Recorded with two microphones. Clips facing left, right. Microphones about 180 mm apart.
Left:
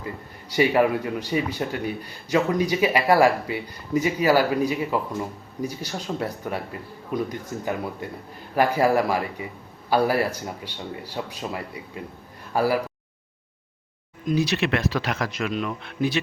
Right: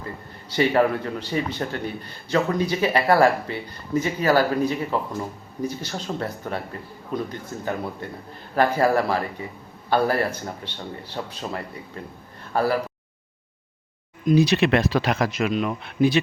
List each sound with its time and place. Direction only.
0.5 s speech: 10° left (ahead or behind)
14.3 s speech: 20° right (ahead or behind)